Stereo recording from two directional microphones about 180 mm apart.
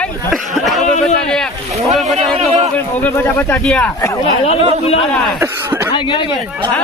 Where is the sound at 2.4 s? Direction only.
35° right (ahead or behind).